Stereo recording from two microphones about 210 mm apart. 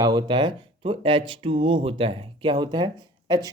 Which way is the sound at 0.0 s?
20° right (ahead or behind).